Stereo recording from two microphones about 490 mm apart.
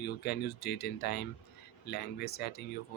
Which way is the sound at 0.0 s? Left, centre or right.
Centre.